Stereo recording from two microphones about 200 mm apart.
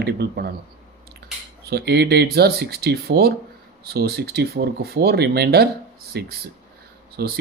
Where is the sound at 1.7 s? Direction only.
55° right (ahead or behind).